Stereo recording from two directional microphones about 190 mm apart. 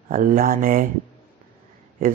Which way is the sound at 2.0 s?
45° right (ahead or behind).